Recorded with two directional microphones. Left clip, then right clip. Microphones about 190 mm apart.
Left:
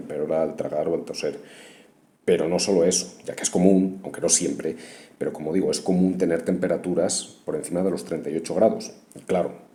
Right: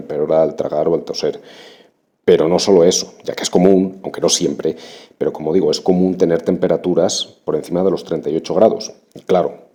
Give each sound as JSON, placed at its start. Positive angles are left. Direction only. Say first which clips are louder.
{"t": 0.1, "sound": "speech", "louder": "right 10 dB", "side_deg": -40}